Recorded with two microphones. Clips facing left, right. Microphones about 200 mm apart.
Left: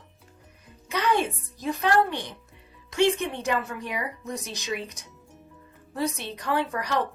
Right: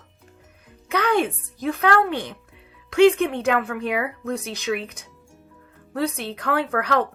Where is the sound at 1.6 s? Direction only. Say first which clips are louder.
Right 3 dB; 60° right (ahead or behind).